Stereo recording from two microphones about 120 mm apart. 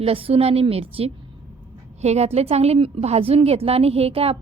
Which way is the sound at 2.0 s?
65° right (ahead or behind).